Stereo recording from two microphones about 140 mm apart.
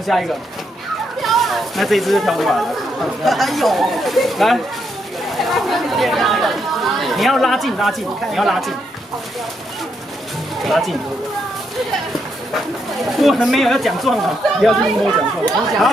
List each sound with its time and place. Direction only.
0.0 s speech: centre (ahead or behind)
10.6 s speech: centre (ahead or behind)
13.2 s speech: centre (ahead or behind)